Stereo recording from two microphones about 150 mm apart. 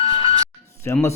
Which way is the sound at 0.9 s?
15° left (ahead or behind).